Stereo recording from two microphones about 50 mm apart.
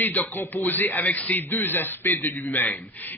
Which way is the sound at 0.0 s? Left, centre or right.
Left.